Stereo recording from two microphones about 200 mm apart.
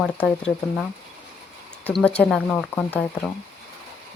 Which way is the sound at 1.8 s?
5° left (ahead or behind).